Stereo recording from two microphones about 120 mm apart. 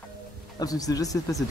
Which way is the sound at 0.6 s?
30° left (ahead or behind).